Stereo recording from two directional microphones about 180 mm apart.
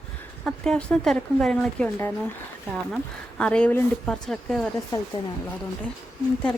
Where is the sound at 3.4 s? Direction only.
5° left (ahead or behind).